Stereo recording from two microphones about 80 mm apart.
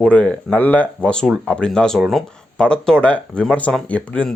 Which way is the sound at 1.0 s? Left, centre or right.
Centre.